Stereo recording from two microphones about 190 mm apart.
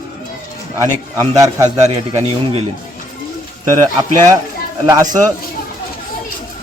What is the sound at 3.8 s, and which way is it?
Speech, 15° right (ahead or behind).